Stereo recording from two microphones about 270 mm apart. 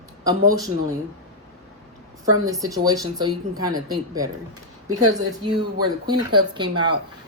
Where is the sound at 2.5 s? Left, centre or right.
Centre.